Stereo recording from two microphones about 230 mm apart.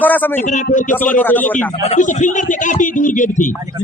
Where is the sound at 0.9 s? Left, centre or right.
Centre.